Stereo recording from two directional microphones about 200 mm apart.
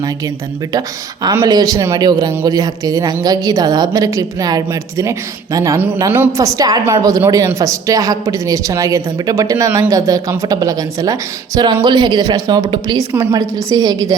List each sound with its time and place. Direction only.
0.7 s a woman's voice: 20° right (ahead or behind)